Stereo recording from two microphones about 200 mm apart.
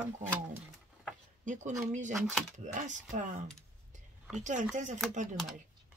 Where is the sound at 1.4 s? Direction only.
40° right (ahead or behind).